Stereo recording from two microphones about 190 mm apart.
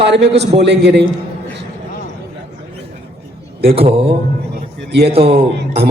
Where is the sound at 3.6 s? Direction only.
30° right (ahead or behind).